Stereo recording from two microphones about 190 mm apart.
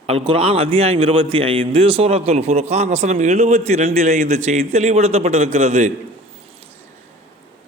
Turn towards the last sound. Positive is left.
turn(degrees=-35)  # may be behind; listen again after turning